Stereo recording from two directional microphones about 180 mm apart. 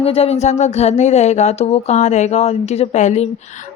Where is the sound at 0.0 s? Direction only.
35° left (ahead or behind).